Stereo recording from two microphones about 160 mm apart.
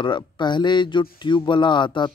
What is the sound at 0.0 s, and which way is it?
Speech, 30° left (ahead or behind).